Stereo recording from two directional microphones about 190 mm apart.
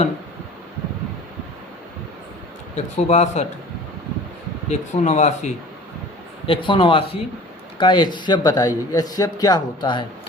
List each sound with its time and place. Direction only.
2.7 s speech: 35° left (ahead or behind)
4.7 s speech: 35° left (ahead or behind)
6.4 s speech: 25° left (ahead or behind)